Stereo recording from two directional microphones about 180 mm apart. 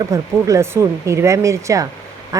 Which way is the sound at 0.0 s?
20° right (ahead or behind).